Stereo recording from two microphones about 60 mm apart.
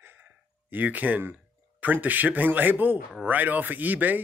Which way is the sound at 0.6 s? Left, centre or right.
Right.